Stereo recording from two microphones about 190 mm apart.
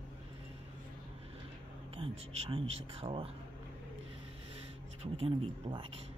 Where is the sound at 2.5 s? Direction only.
30° right (ahead or behind).